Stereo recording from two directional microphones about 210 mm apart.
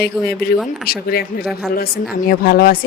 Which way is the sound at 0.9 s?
45° left (ahead or behind).